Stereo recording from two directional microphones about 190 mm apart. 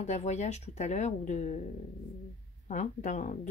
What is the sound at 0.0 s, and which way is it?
Speech, 35° left (ahead or behind).